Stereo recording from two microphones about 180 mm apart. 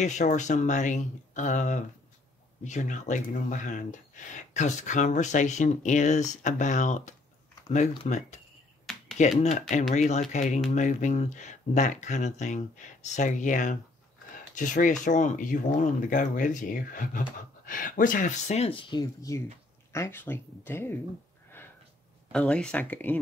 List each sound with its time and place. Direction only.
0.0 s speech: 40° left (ahead or behind)
9.4 s speech: 40° left (ahead or behind); by 21.0 s 10° left (ahead or behind)
22.3 s speech: 5° left (ahead or behind)